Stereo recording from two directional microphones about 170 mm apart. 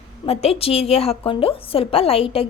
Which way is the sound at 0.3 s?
35° left (ahead or behind).